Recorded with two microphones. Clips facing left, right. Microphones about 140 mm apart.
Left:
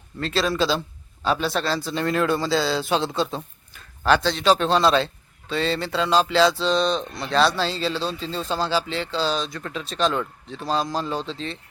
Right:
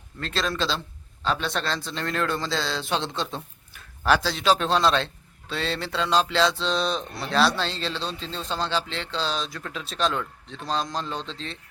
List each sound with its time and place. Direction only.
0.2 s a man's voice: 5° left (ahead or behind)